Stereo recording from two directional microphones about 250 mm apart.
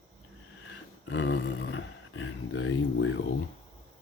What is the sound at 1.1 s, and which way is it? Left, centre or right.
Speech, left.